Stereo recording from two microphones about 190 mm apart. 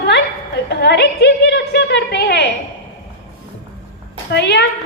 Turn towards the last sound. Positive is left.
turn(degrees=60)  # may be behind; listen again after turning